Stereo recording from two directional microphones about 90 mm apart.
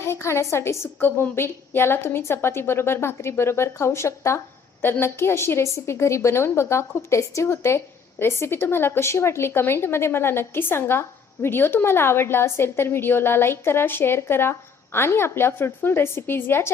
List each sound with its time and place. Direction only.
0.0 s a woman's voice: 30° left (ahead or behind)